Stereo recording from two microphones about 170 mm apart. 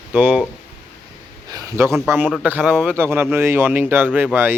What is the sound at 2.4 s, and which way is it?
Speech, 10° right (ahead or behind).